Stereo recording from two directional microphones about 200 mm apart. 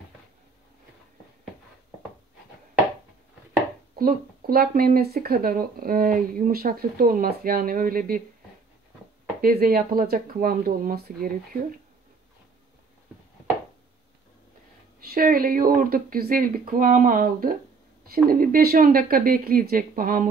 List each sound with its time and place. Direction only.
3.9 s speech: 50° right (ahead or behind)
9.4 s speech: 45° right (ahead or behind)
15.0 s speech: 45° right (ahead or behind)